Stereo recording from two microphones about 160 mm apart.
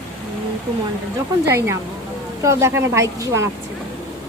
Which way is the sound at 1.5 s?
15° right (ahead or behind).